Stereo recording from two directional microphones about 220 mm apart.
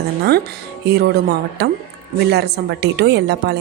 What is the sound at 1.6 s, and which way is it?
A woman's voice, 50° right (ahead or behind).